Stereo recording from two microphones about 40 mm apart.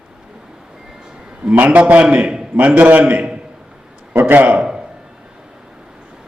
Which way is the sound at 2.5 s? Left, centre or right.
Right.